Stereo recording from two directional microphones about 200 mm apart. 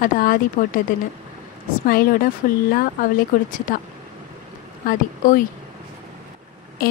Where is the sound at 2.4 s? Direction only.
45° left (ahead or behind).